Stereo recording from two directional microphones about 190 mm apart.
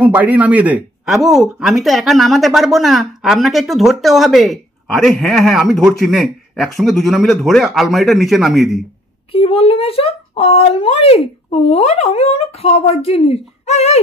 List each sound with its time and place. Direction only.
0.0 s speech: 10° right (ahead or behind)
9.3 s speech: 30° left (ahead or behind)